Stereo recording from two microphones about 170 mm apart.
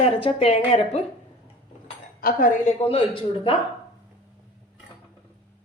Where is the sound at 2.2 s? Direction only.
55° left (ahead or behind); by 3.5 s 30° left (ahead or behind).